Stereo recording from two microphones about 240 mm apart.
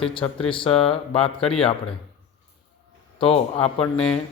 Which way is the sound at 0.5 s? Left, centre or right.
Left.